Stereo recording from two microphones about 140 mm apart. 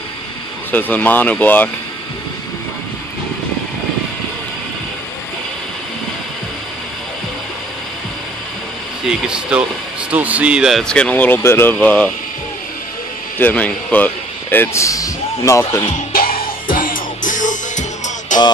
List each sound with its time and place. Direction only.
0.7 s a man's voice: 10° left (ahead or behind)
9.3 s a man's voice: 5° right (ahead or behind); by 12.1 s 10° left (ahead or behind)
13.4 s a man's voice: 10° left (ahead or behind)
16.1 s music: 90° left
16.7 s music: 80° left; by 18.4 s 60° left (ahead or behind)